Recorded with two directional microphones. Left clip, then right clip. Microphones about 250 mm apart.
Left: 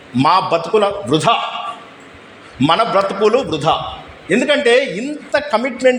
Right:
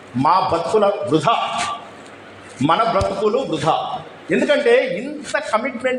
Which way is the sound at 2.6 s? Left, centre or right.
Left.